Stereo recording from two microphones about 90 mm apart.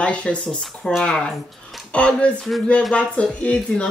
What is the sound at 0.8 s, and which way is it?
Speech, 10° left (ahead or behind).